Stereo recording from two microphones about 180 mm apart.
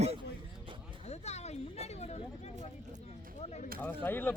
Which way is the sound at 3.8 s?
10° left (ahead or behind).